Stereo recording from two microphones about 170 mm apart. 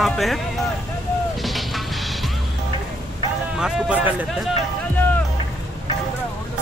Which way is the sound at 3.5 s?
5° right (ahead or behind).